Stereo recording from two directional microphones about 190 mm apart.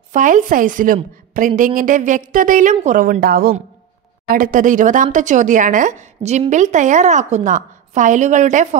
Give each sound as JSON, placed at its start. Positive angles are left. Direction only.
{"t": 0.1, "sound": "a woman's voice", "side_deg": -45}